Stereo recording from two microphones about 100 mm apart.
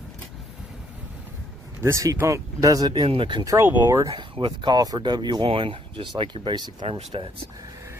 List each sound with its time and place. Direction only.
1.8 s speech: 30° right (ahead or behind)
2.9 s speech: 55° right (ahead or behind)
3.4 s speech: 25° right (ahead or behind)
4.1 s speech: 55° right (ahead or behind)
6.9 s speech: 80° right